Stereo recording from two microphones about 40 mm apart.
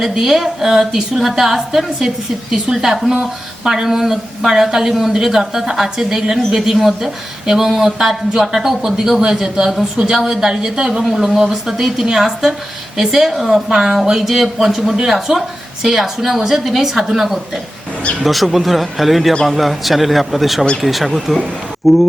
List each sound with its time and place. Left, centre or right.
0.0 s a woman's voice: centre
9.2 s a woman's voice: centre